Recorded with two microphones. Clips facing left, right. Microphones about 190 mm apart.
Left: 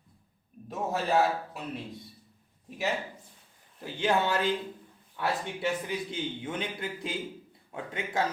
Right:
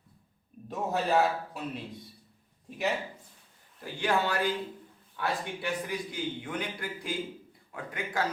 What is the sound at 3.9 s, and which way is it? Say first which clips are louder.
Speech: left 2 dB; 20° left (ahead or behind).